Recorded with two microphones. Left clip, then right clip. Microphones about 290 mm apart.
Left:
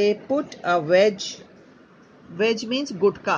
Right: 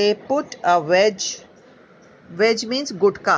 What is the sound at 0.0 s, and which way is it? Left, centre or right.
Speech, centre.